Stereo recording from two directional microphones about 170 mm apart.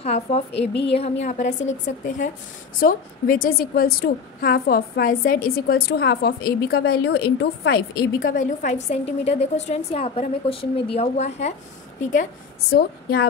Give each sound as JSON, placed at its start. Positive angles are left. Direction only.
{"t": 0.0, "sound": "a woman's voice", "side_deg": 35}
{"t": 0.5, "sound": "speech", "side_deg": 90}
{"t": 0.9, "sound": "a woman's voice", "side_deg": 35}
{"t": 2.8, "sound": "a woman's voice", "side_deg": 55}
{"t": 12.7, "sound": "a woman's voice", "side_deg": 65}